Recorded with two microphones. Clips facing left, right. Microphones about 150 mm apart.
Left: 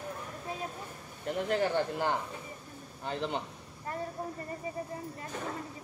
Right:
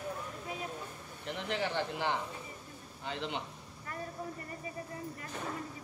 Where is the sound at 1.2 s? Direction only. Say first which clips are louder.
Left 6 dB; 45° left (ahead or behind).